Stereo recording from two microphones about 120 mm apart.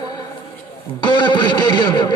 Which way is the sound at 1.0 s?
40° left (ahead or behind).